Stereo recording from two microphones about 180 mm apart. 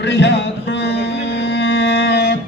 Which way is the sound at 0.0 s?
75° left (ahead or behind).